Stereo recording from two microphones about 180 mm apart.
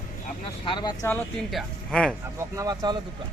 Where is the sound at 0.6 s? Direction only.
25° left (ahead or behind).